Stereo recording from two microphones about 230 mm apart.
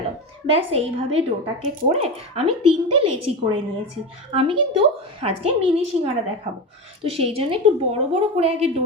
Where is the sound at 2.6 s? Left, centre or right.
Right.